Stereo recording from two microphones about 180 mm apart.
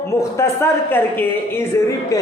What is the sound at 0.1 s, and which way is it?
A woman's voice, 15° left (ahead or behind).